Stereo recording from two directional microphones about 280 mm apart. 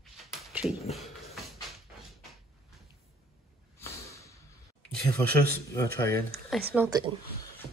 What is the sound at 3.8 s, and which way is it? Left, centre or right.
Snort, centre.